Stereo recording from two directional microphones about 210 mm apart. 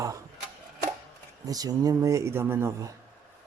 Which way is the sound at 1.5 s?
15° right (ahead or behind).